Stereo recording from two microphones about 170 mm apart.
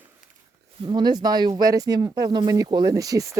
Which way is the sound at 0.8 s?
25° right (ahead or behind).